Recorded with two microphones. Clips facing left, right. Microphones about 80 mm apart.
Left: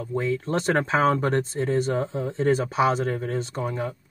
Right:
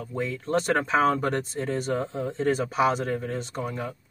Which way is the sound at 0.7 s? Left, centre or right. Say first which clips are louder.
Left 3 dB; left.